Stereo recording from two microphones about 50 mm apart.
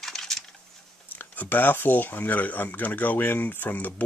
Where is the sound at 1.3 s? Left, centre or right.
Left.